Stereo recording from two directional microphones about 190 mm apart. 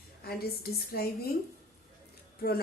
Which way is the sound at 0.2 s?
55° left (ahead or behind).